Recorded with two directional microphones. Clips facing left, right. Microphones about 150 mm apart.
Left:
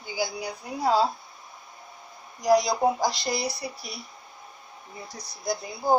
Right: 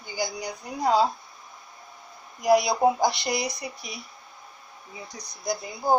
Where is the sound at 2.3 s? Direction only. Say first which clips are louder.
Right 1 dB; 5° right (ahead or behind).